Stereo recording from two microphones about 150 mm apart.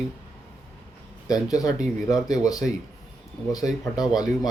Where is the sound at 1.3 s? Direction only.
25° left (ahead or behind).